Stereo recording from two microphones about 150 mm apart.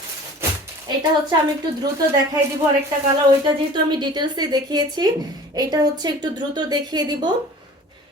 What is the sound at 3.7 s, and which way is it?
A woman's voice, 30° right (ahead or behind).